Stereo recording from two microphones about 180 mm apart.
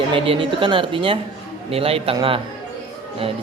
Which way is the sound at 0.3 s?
30° right (ahead or behind).